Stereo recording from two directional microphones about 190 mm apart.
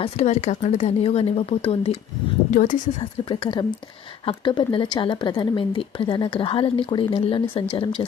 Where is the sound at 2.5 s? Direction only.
45° left (ahead or behind).